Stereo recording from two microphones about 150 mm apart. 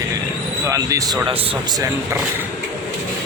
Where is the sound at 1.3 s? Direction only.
40° right (ahead or behind).